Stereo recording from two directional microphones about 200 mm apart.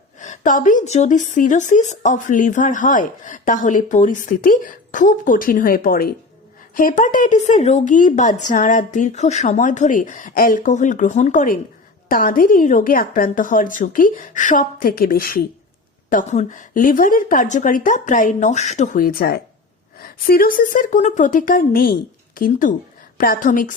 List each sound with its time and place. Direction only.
0.2 s a woman's voice: 40° left (ahead or behind)
16.0 s a woman's voice: 40° left (ahead or behind)